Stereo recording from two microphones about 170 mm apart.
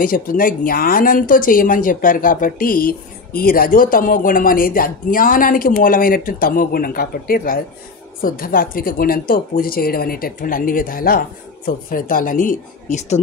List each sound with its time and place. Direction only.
0.0 s speech: 55° left (ahead or behind)